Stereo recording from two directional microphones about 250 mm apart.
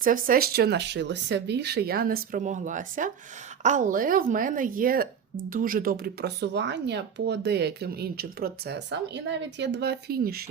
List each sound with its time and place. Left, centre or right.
0.0 s speech: right